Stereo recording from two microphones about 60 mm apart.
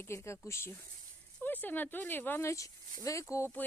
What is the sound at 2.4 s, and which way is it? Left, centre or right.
Speech, left.